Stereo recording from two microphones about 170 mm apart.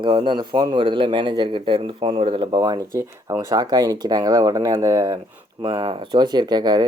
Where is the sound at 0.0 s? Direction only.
30° right (ahead or behind).